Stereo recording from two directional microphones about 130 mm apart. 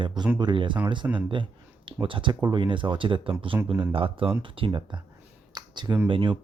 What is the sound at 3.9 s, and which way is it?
Speech, 45° right (ahead or behind).